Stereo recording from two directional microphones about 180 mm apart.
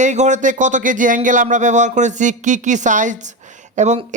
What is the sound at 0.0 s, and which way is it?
Speech, 40° right (ahead or behind).